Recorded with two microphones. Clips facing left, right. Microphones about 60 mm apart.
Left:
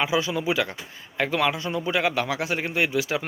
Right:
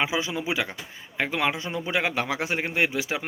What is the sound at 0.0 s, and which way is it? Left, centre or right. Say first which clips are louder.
Speech: left 3 dB; right.